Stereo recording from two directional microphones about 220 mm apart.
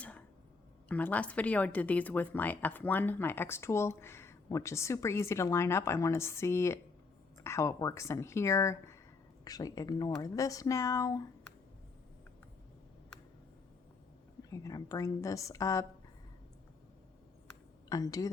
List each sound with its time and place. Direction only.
0.9 s speech: 5° left (ahead or behind)
14.5 s speech: 15° left (ahead or behind)
17.8 s speech: 15° left (ahead or behind)